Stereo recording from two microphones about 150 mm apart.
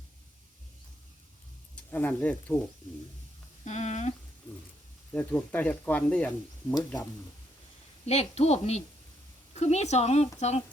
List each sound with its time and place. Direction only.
1.7 s speech: 10° left (ahead or behind)
3.6 s speech: 50° left (ahead or behind)
5.1 s speech: 10° left (ahead or behind)
6.7 s speech: 25° left (ahead or behind)
8.0 s speech: 45° left (ahead or behind)